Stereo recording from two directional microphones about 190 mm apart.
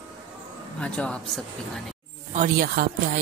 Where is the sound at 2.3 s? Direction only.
45° right (ahead or behind).